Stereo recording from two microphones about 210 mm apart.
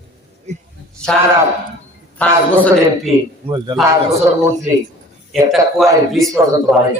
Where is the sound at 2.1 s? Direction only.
5° left (ahead or behind).